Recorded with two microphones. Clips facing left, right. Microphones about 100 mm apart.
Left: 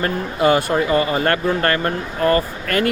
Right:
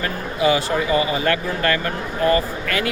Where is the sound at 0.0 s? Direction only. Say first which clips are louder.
Left 2 dB; 55° left (ahead or behind).